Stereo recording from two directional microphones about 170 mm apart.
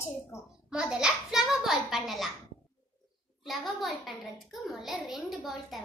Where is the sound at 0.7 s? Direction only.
5° right (ahead or behind).